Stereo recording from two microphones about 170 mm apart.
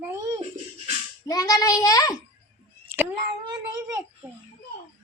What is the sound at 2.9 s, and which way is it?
Cat, 15° right (ahead or behind).